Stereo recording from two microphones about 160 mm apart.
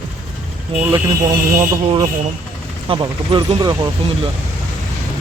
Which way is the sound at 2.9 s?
30° right (ahead or behind).